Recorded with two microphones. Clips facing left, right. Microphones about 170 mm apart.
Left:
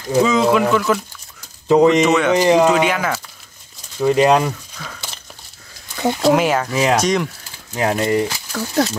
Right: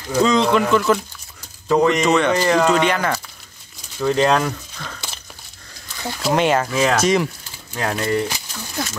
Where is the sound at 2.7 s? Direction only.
5° left (ahead or behind).